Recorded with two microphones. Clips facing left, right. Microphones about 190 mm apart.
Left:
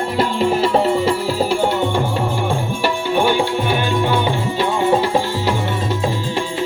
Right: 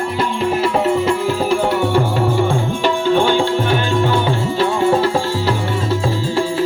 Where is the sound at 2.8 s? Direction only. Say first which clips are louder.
Right 3 dB; 10° left (ahead or behind).